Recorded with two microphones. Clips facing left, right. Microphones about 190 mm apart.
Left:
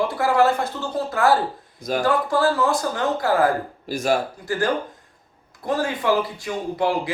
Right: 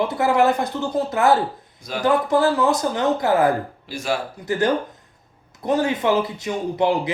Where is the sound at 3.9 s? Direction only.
45° left (ahead or behind).